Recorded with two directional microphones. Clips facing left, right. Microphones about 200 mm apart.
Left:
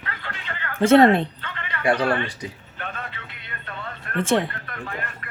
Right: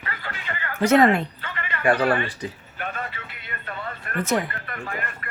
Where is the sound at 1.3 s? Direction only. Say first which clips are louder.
Right 1 dB; 10° right (ahead or behind).